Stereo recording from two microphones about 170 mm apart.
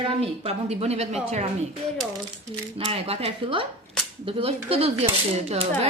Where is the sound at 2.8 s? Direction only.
35° right (ahead or behind).